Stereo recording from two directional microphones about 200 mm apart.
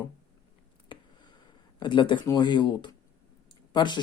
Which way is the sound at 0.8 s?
25° left (ahead or behind).